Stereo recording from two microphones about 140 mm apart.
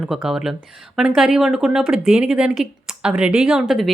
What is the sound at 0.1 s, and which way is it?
Speech, 5° right (ahead or behind).